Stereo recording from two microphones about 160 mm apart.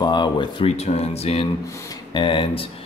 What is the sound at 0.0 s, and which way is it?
Speech, 25° left (ahead or behind).